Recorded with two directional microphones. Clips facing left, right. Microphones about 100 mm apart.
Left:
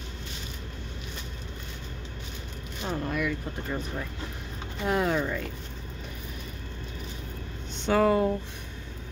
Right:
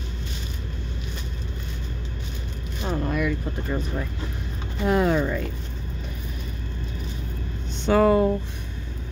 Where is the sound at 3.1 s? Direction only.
30° right (ahead or behind).